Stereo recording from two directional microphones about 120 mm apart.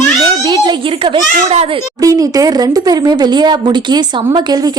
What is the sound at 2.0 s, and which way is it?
A woman's voice, 30° right (ahead or behind).